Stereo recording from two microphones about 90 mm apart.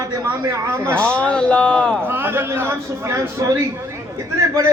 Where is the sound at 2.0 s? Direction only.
25° right (ahead or behind).